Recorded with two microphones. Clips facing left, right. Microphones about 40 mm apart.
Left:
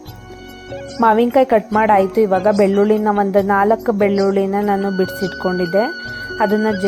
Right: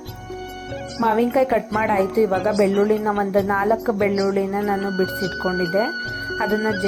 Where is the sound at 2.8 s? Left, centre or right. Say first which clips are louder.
Left 5 dB; left.